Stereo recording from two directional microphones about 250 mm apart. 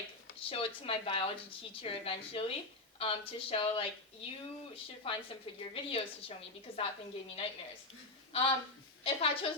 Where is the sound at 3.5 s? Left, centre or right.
Left.